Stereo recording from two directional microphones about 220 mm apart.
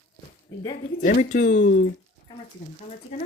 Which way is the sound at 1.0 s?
35° left (ahead or behind).